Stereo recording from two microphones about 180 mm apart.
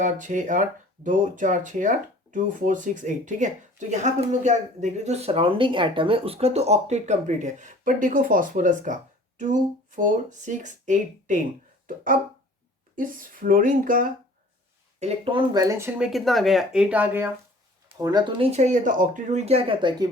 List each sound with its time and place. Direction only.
0.0 s speech: 45° right (ahead or behind)
14.9 s speech: 35° right (ahead or behind); by 17.2 s 10° right (ahead or behind)
17.8 s speech: 20° right (ahead or behind)
18.5 s speech: 40° right (ahead or behind)